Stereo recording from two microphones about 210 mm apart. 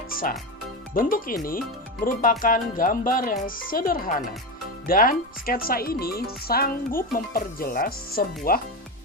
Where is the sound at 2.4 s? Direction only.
40° left (ahead or behind).